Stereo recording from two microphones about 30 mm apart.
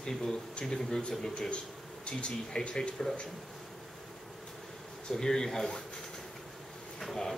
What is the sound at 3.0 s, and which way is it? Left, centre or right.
Speech, left.